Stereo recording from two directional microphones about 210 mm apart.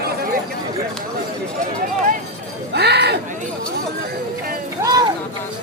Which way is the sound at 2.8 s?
50° right (ahead or behind).